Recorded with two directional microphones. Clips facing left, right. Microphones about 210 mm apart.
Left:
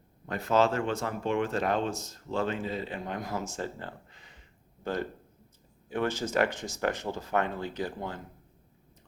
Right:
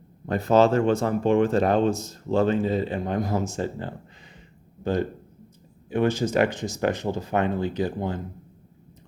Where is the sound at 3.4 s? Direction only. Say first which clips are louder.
Right 7 dB; 20° right (ahead or behind).